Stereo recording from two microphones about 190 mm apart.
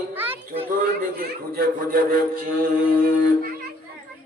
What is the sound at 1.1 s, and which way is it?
A man's voice, 50° right (ahead or behind).